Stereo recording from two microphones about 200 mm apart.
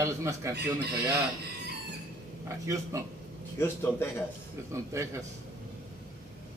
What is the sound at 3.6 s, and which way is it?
Speech, 10° left (ahead or behind).